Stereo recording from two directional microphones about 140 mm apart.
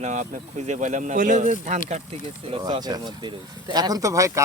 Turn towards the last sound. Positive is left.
turn(degrees=-20)  # may be behind; listen again after turning